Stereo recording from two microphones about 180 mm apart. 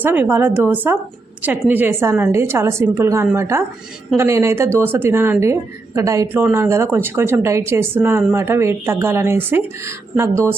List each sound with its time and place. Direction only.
0.0 s speech: 10° right (ahead or behind)